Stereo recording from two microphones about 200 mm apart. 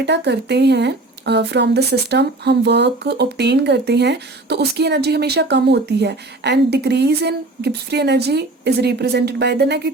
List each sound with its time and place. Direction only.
0.0 s speech: 55° right (ahead or behind)